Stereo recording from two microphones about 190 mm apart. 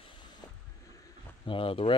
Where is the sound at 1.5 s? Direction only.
30° left (ahead or behind).